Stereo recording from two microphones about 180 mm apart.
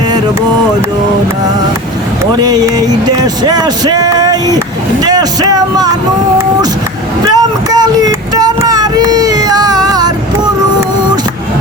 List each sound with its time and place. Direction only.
2.4 s speech: 20° right (ahead or behind)
7.3 s child singing: 20° right (ahead or behind)